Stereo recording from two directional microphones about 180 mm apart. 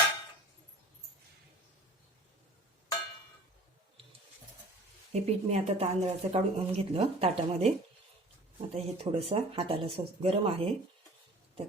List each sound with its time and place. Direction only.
5.1 s speech: 35° right (ahead or behind)
8.7 s speech: 35° right (ahead or behind)